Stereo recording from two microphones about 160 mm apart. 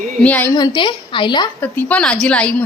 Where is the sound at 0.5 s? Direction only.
25° left (ahead or behind).